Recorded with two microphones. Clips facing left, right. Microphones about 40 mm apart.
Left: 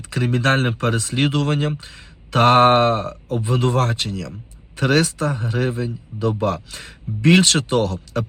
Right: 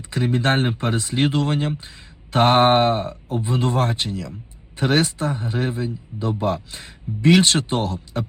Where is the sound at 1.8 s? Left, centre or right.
Left.